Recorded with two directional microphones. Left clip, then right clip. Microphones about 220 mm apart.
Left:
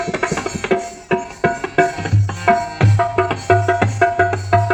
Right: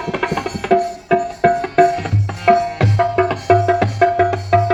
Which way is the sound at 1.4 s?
30° right (ahead or behind).